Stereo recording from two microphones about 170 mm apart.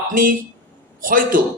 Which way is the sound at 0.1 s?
55° right (ahead or behind).